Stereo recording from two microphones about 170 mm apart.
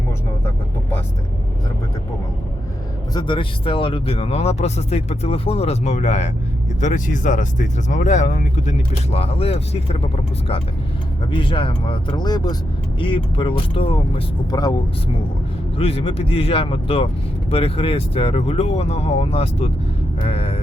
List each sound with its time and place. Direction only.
0.4 s vehicle: 15° left (ahead or behind)
3.2 s speech: 30° left (ahead or behind)
11.3 s speech: 30° left (ahead or behind)
15.8 s speech: 35° left (ahead or behind)